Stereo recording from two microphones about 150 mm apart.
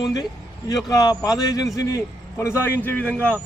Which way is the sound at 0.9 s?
25° left (ahead or behind).